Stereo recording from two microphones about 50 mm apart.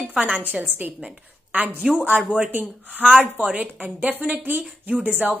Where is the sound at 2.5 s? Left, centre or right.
Right.